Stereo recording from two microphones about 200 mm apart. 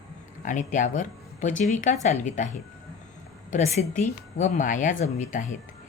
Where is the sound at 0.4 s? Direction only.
40° left (ahead or behind).